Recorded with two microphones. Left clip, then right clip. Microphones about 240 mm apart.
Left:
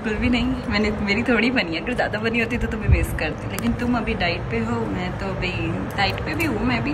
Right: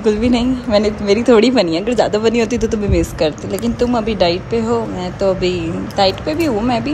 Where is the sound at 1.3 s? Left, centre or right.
Right.